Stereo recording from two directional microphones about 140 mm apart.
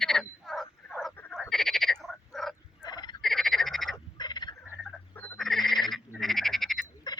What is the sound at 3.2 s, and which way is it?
Frog, centre (ahead or behind).